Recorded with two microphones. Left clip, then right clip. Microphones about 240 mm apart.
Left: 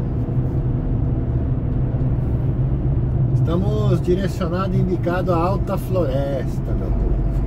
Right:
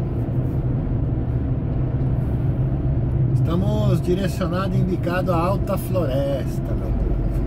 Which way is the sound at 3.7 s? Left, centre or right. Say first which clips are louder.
Left 2 dB; centre.